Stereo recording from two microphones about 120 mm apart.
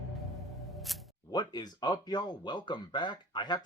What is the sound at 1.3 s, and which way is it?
Speech, 35° left (ahead or behind).